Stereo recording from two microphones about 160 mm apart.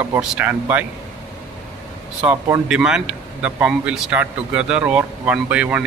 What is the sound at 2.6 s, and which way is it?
A man's voice, 5° right (ahead or behind).